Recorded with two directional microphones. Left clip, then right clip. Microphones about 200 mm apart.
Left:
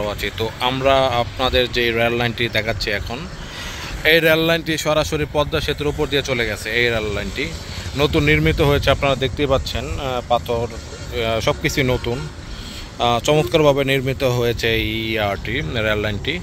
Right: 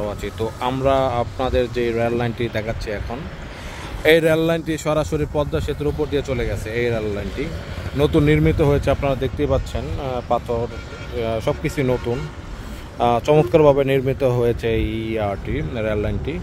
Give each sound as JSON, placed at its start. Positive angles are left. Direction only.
{"t": 0.0, "sound": "speech", "side_deg": 0}
{"t": 4.0, "sound": "speech", "side_deg": -10}
{"t": 8.0, "sound": "speech", "side_deg": -15}
{"t": 13.0, "sound": "speech", "side_deg": -25}